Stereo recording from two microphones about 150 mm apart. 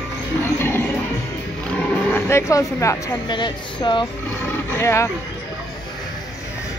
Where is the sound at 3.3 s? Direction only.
30° left (ahead or behind).